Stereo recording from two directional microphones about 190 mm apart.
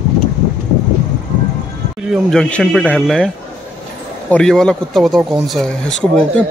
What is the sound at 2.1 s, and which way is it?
Speech, 5° left (ahead or behind).